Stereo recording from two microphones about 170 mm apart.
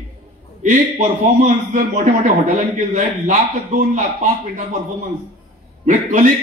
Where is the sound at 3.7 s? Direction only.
60° right (ahead or behind).